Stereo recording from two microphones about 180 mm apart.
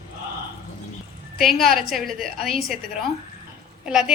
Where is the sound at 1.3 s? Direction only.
Centre (ahead or behind).